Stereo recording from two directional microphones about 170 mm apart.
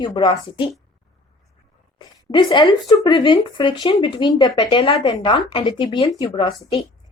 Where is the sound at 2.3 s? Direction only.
25° left (ahead or behind).